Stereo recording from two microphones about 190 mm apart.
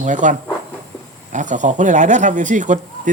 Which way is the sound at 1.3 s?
40° right (ahead or behind).